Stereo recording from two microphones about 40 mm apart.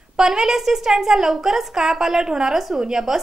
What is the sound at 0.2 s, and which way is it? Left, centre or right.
A woman's voice, centre.